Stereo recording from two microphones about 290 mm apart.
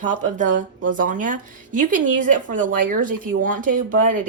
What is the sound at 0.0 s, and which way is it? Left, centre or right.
Speech, right.